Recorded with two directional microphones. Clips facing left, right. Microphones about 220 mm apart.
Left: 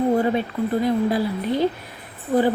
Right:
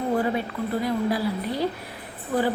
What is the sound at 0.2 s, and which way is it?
A woman's voice, 25° left (ahead or behind).